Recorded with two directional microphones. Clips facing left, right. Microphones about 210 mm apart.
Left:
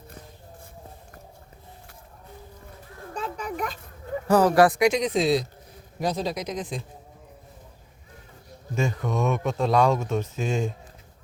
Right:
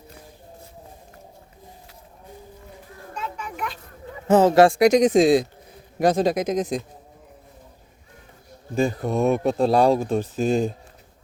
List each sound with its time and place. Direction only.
3.2 s children playing: 35° left (ahead or behind)
4.3 s speech: 25° right (ahead or behind)
4.9 s speech: 45° right (ahead or behind)
8.7 s speech: 35° right (ahead or behind)